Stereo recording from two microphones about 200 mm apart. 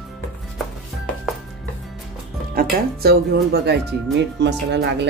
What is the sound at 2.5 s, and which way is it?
Speech, 50° right (ahead or behind).